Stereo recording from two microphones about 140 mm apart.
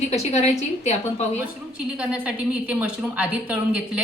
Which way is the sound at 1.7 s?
5° right (ahead or behind).